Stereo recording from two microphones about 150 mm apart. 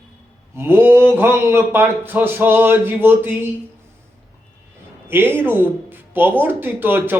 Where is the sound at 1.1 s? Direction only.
15° right (ahead or behind).